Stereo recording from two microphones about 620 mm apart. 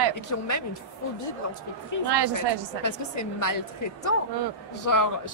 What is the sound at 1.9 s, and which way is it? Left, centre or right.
Speech, left.